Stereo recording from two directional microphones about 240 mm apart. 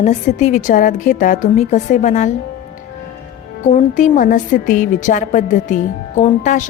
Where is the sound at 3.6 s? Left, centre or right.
Left.